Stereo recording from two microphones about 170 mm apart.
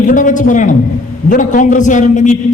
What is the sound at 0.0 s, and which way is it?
A man's voice, 50° left (ahead or behind).